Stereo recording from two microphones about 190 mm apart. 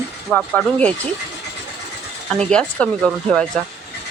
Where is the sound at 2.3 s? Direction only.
5° left (ahead or behind).